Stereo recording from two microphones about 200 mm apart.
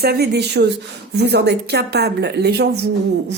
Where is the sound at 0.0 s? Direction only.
50° right (ahead or behind).